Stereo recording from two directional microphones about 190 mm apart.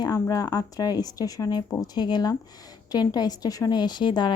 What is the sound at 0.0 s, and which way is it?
Speech, 20° left (ahead or behind).